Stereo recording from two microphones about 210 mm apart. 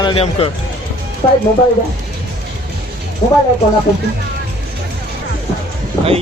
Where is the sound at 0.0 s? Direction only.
25° left (ahead or behind).